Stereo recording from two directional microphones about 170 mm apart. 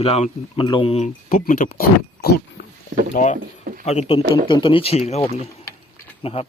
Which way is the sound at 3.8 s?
40° left (ahead or behind).